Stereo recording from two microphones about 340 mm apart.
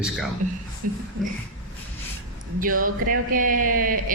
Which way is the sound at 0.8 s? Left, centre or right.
Right.